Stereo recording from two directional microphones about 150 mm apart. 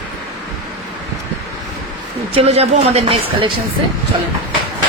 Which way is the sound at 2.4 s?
45° right (ahead or behind).